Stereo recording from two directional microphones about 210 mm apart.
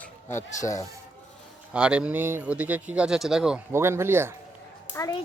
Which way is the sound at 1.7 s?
5° right (ahead or behind).